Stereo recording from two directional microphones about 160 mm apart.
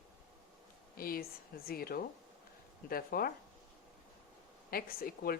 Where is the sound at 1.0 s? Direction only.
65° left (ahead or behind).